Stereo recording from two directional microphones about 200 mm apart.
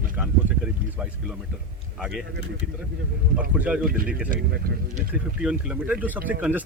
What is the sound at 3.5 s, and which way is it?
Speech, 5° right (ahead or behind).